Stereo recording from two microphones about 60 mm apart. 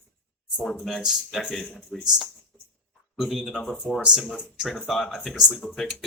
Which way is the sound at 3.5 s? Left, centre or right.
Centre.